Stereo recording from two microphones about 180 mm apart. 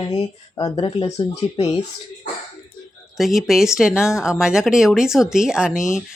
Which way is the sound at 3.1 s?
Centre (ahead or behind).